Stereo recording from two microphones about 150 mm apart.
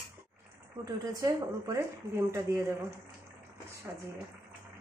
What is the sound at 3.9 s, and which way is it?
Speech, 15° right (ahead or behind).